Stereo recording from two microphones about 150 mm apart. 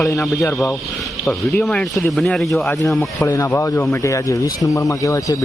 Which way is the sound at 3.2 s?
20° left (ahead or behind).